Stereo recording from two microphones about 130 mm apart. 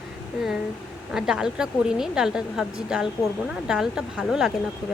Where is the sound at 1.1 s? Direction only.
5° right (ahead or behind).